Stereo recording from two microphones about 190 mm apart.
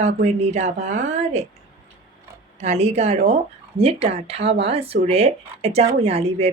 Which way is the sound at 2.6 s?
35° right (ahead or behind).